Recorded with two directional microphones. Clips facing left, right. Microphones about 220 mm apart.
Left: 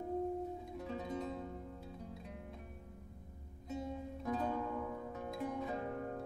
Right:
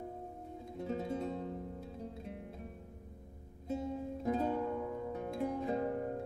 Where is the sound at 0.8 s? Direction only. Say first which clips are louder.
Right 5 dB; 30° right (ahead or behind).